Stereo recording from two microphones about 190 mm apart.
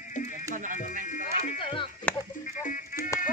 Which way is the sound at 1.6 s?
25° left (ahead or behind).